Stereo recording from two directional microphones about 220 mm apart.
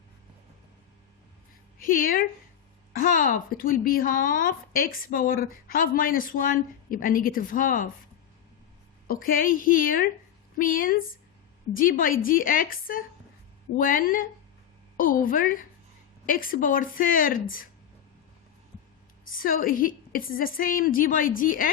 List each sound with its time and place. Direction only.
1.8 s speech: 40° left (ahead or behind)
9.0 s speech: 40° left (ahead or behind)
19.3 s speech: 40° left (ahead or behind)